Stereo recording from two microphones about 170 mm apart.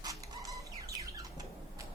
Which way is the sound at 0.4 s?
20° right (ahead or behind).